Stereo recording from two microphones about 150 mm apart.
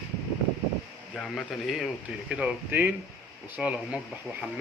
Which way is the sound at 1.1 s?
5° left (ahead or behind).